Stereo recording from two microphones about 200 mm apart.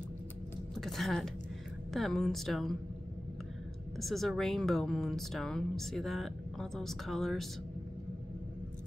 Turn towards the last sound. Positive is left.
turn(degrees=0)  # may be behind; listen again after turning